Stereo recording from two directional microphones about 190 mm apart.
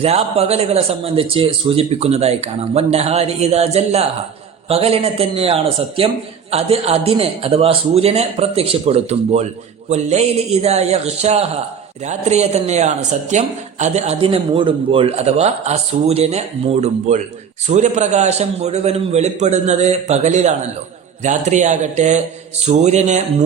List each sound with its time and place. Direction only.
0.0 s a man's voice: 30° right (ahead or behind)